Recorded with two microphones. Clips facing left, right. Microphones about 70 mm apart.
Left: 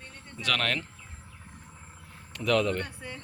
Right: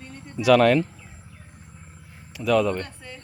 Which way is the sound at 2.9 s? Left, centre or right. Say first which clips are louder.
Even; centre.